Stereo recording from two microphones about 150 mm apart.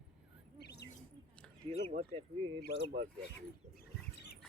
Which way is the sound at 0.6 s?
90° left.